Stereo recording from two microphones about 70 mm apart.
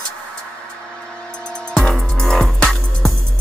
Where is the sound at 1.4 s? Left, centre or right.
Centre.